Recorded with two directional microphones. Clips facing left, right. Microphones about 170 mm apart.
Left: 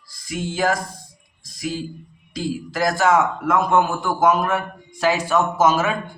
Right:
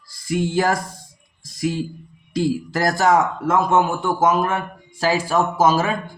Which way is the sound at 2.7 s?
40° right (ahead or behind).